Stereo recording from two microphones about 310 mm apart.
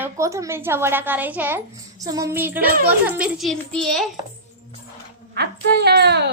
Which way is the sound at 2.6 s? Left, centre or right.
Right.